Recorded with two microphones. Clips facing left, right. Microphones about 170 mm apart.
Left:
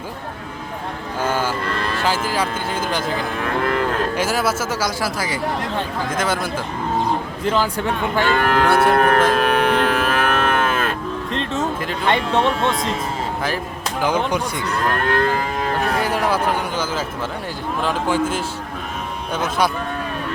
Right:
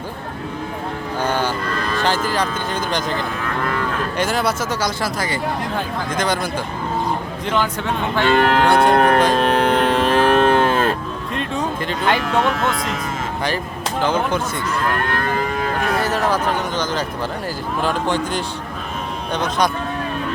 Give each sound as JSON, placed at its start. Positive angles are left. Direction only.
{"t": 1.2, "sound": "music", "side_deg": 5}
{"t": 2.0, "sound": "speech", "side_deg": 5}
{"t": 8.2, "sound": "speech", "side_deg": -20}
{"t": 9.0, "sound": "speech", "side_deg": -35}
{"t": 9.3, "sound": "cattle", "side_deg": -30}
{"t": 11.3, "sound": "speech", "side_deg": 0}
{"t": 12.0, "sound": "speech", "side_deg": 30}
{"t": 14.0, "sound": "speech", "side_deg": 10}
{"t": 16.0, "sound": "speech", "side_deg": 10}